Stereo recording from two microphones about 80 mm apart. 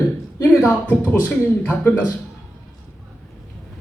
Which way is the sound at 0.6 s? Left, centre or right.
Centre.